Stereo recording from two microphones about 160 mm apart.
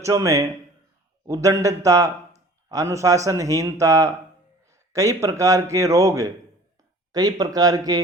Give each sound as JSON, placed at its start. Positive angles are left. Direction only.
{"t": 0.0, "sound": "a man's voice", "side_deg": -20}